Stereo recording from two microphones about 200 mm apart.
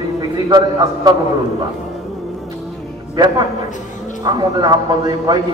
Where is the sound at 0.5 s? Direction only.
20° right (ahead or behind).